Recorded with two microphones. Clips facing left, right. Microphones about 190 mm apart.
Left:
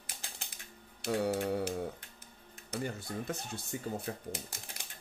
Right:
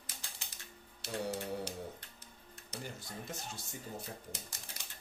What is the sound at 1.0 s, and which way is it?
Speech, 60° left (ahead or behind).